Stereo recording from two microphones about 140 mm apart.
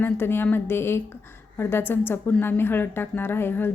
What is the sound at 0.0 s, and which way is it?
A woman's voice, 15° left (ahead or behind).